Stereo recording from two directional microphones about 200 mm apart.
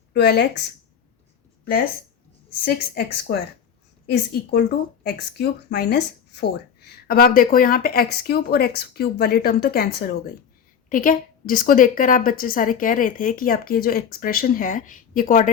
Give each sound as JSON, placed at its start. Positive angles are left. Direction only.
{"t": 0.1, "sound": "speech", "side_deg": 55}
{"t": 2.6, "sound": "speech", "side_deg": 50}
{"t": 4.5, "sound": "speech", "side_deg": 55}